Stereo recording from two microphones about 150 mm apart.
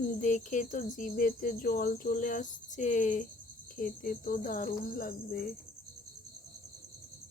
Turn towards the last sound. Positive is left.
turn(degrees=70)  # may be behind; listen again after turning